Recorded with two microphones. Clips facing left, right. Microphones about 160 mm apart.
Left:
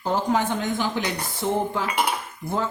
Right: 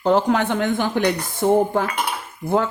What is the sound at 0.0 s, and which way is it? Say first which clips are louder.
Speech: right 5 dB; 70° right (ahead or behind).